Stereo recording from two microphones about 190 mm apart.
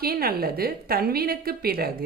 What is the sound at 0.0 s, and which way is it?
Speech, 50° right (ahead or behind).